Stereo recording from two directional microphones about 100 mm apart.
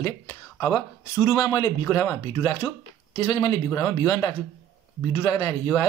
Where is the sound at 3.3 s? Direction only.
45° left (ahead or behind).